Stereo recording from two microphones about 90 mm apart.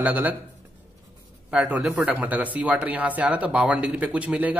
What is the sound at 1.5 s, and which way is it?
Speech, 10° right (ahead or behind).